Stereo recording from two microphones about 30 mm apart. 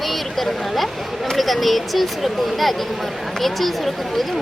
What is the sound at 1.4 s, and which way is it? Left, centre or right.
Speech, centre.